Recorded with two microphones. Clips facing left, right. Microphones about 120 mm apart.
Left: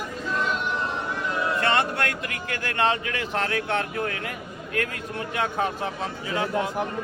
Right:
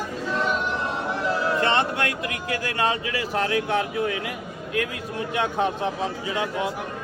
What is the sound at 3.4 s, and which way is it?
Speech, 15° right (ahead or behind).